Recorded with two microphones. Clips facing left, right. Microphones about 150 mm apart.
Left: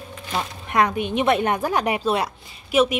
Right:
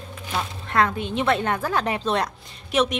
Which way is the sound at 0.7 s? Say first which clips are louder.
Left 2 dB; 15° left (ahead or behind).